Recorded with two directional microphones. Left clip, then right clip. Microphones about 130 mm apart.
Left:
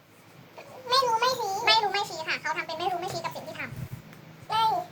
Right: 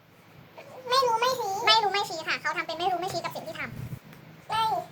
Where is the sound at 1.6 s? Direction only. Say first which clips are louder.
Right 1 dB; 55° right (ahead or behind).